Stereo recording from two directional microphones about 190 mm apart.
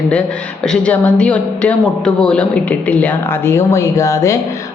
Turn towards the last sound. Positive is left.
turn(degrees=15)  # may be behind; listen again after turning